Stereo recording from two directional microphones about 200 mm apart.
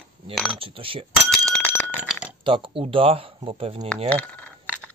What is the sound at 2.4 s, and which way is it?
Speech, 25° right (ahead or behind).